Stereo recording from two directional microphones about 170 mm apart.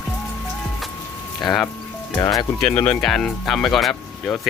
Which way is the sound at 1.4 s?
Centre (ahead or behind).